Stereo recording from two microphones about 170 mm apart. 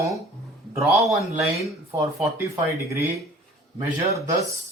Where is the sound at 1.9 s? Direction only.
15° right (ahead or behind).